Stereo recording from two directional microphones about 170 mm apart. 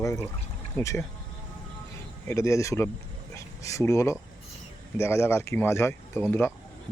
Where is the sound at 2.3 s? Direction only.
15° left (ahead or behind).